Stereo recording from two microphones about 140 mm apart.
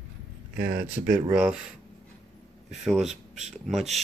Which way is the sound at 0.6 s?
90° right.